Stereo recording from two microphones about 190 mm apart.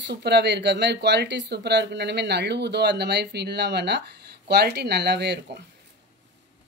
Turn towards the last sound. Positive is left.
turn(degrees=-60)  # may be behind; listen again after turning